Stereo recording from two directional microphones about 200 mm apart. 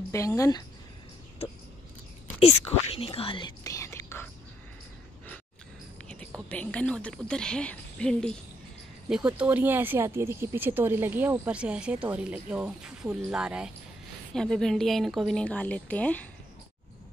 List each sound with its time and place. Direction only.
0.1 s speech: 15° left (ahead or behind)
1.4 s a sound: 30° left (ahead or behind)
2.4 s speech: 30° left (ahead or behind); by 4.3 s 15° left (ahead or behind)
6.5 s speech: 5° left (ahead or behind)
9.1 s speech: 5° right (ahead or behind)